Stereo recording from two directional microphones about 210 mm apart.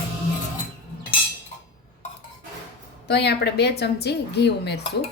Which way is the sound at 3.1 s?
50° left (ahead or behind).